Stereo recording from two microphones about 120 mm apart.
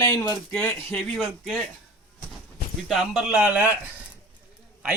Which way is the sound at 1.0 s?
5° left (ahead or behind).